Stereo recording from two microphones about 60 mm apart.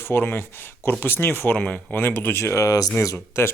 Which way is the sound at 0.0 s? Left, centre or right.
Left.